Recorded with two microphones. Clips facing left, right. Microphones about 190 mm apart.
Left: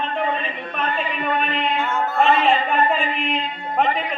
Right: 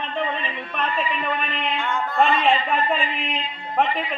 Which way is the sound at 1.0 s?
50° left (ahead or behind).